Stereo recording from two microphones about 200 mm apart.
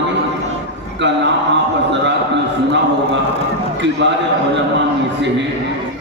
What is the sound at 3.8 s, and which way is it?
Speech, 60° right (ahead or behind).